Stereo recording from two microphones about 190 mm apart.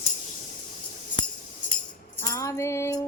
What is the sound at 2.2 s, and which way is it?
Music, 15° left (ahead or behind).